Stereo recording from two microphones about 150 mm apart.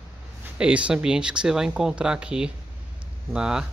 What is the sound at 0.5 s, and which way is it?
Speech, 5° right (ahead or behind).